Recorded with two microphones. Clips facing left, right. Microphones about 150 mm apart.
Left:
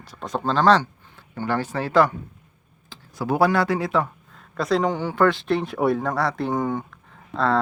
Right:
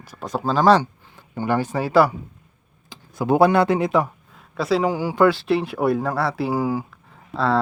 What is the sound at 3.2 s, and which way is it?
Speech, 20° right (ahead or behind).